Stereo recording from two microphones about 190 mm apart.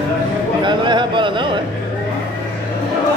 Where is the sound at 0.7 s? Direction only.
25° right (ahead or behind).